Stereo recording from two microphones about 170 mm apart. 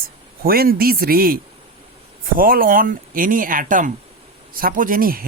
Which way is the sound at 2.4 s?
55° right (ahead or behind).